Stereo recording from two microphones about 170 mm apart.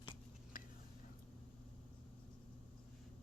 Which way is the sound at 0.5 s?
55° left (ahead or behind).